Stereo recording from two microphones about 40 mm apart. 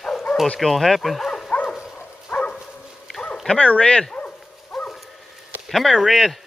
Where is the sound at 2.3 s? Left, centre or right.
Left.